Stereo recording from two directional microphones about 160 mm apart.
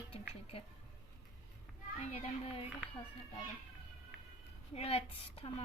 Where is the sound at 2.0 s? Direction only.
40° left (ahead or behind).